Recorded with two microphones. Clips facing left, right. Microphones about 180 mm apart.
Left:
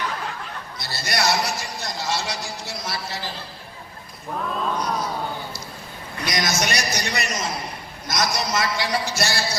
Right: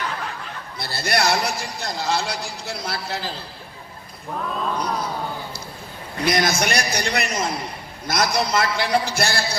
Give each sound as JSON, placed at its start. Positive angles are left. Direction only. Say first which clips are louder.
{"t": 0.8, "sound": "a man's voice", "louder": "right 3 dB", "side_deg": -60}
{"t": 4.3, "sound": "cat", "louder": "even", "side_deg": 0}
{"t": 6.2, "sound": "a man's voice", "louder": "right 4 dB", "side_deg": -55}